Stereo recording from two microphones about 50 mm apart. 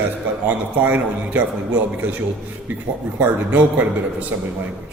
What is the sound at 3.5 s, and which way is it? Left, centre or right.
Mantra, right.